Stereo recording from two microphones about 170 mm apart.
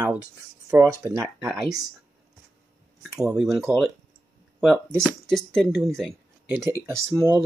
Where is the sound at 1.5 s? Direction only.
Centre (ahead or behind).